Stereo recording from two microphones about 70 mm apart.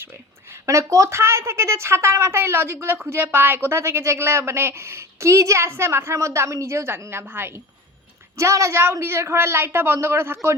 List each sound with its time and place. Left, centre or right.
0.5 s a woman's voice: right
8.4 s a woman's voice: right